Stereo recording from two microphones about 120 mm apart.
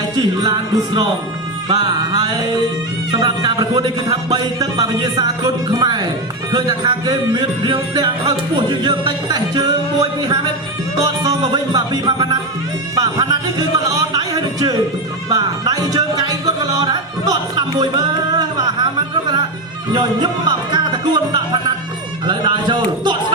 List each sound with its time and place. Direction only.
0.2 s music: 35° right (ahead or behind)